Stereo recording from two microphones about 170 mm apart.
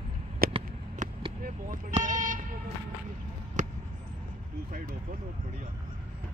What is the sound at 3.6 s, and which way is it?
Basketball bounce, 45° right (ahead or behind).